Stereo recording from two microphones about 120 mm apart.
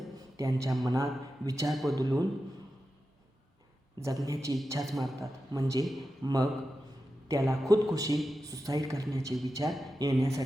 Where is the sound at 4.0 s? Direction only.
25° right (ahead or behind).